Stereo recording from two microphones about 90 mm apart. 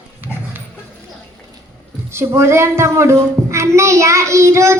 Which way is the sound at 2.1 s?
30° right (ahead or behind).